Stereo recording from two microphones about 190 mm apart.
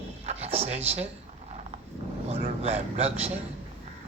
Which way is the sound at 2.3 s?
30° right (ahead or behind).